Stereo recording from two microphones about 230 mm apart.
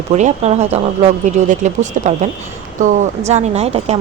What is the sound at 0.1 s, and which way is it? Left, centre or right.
Speech, right.